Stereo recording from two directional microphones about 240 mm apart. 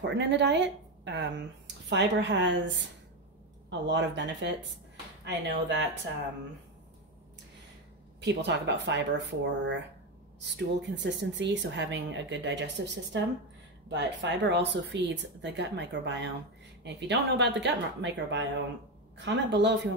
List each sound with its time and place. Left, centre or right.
0.1 s speech: right
3.8 s speech: right
8.2 s speech: right